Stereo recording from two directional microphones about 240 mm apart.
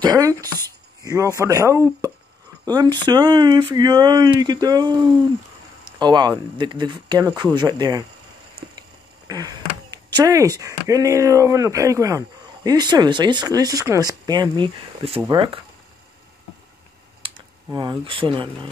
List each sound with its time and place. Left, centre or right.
0.0 s speech: centre
9.3 s speech: centre
17.6 s speech: centre